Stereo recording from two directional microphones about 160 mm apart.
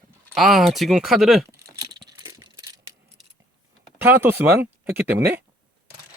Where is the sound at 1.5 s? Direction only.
20° right (ahead or behind).